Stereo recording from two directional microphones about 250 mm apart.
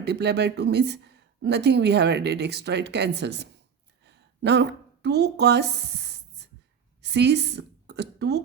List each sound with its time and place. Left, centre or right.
0.0 s a woman's voice: right
4.0 s a sound: right
7.0 s a woman's voice: right